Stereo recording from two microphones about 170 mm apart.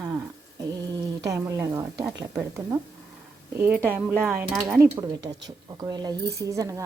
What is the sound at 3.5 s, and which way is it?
Speech, 10° right (ahead or behind).